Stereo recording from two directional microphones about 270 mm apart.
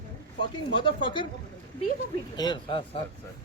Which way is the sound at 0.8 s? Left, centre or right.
Centre.